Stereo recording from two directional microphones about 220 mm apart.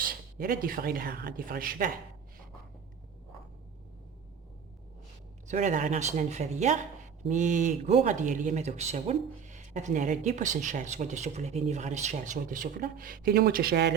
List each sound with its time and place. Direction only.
0.0 s speech: 40° right (ahead or behind)
5.5 s speech: 35° right (ahead or behind)